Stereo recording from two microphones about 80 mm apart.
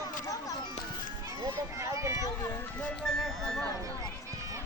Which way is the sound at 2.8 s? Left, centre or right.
Centre.